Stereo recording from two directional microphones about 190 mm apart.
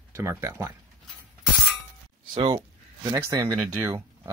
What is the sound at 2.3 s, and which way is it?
Speech, 25° right (ahead or behind).